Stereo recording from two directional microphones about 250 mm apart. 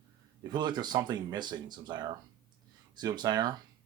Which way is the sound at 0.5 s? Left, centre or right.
Centre.